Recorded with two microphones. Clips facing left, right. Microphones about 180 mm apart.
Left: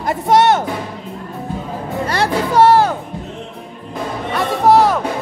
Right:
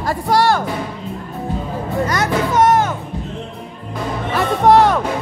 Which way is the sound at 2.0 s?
30° left (ahead or behind).